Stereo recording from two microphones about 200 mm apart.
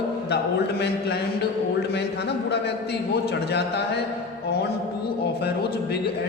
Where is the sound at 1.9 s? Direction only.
55° left (ahead or behind).